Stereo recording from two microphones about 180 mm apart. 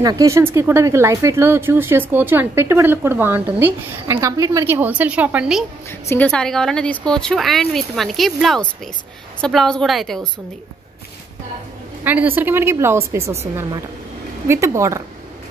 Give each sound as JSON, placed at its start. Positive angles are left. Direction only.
{"t": 0.0, "sound": "speech", "side_deg": -20}
{"t": 5.9, "sound": "a woman's voice", "side_deg": 10}
{"t": 12.0, "sound": "speech", "side_deg": -10}
{"t": 14.5, "sound": "speech", "side_deg": -15}